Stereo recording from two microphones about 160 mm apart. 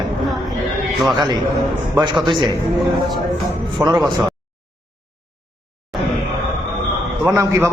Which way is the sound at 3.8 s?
20° right (ahead or behind).